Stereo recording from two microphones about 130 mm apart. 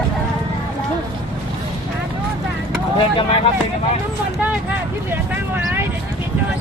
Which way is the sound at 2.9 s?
40° left (ahead or behind).